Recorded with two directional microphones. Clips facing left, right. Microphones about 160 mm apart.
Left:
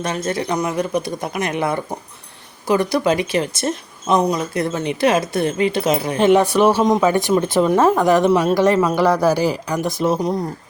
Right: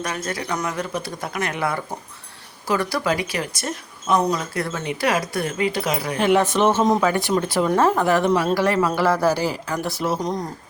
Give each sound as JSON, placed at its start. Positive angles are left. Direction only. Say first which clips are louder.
{"t": 0.0, "sound": "speech", "louder": "left 5 dB", "side_deg": 25}
{"t": 6.4, "sound": "speech", "louder": "left 3 dB", "side_deg": 10}